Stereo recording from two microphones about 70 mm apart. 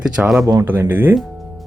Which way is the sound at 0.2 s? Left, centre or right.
Centre.